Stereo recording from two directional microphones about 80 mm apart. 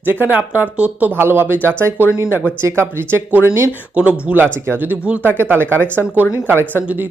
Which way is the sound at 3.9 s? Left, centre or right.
Centre.